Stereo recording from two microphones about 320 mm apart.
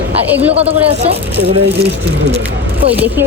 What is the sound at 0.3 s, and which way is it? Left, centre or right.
Speech, centre.